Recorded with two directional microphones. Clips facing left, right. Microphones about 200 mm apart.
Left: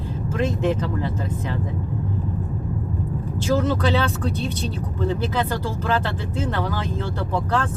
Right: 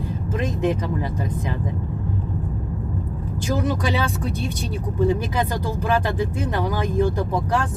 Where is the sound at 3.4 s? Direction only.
15° right (ahead or behind).